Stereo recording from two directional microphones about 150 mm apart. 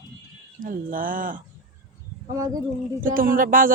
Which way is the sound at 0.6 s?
65° right (ahead or behind).